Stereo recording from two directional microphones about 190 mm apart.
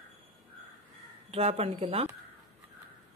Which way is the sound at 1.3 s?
30° right (ahead or behind).